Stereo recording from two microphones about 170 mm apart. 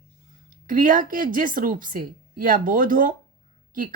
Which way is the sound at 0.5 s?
50° right (ahead or behind).